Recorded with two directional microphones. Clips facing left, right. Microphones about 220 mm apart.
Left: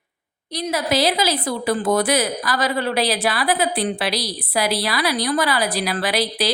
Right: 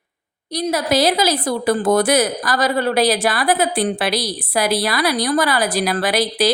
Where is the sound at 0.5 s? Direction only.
40° right (ahead or behind).